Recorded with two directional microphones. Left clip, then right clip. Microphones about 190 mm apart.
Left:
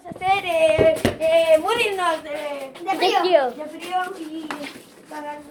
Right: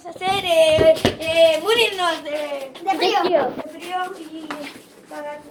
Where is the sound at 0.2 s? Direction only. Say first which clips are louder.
Right 2 dB; 45° right (ahead or behind).